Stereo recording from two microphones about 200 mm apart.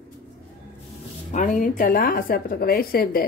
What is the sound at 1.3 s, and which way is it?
Speech, 40° left (ahead or behind).